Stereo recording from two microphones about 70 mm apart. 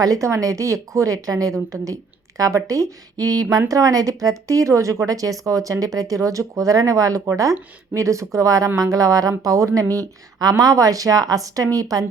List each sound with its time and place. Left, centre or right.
0.0 s speech: right
10.4 s speech: right